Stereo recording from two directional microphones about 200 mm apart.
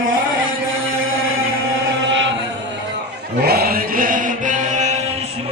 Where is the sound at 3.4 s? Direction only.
50° right (ahead or behind).